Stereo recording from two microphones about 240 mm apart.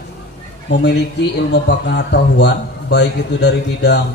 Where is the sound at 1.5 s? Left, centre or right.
Left.